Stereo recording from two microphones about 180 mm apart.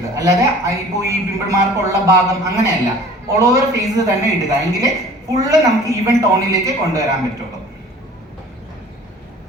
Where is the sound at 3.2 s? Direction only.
15° right (ahead or behind).